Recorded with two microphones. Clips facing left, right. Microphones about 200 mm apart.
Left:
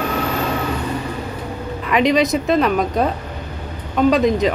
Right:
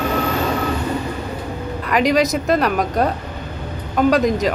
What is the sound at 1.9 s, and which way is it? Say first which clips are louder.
Speech: left 1 dB; centre (ahead or behind).